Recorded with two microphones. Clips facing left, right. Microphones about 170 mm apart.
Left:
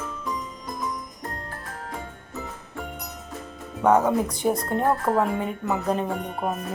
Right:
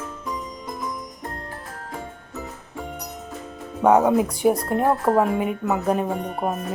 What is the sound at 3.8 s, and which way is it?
A woman's voice, 15° right (ahead or behind).